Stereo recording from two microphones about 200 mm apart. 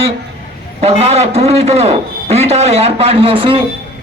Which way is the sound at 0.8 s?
30° right (ahead or behind).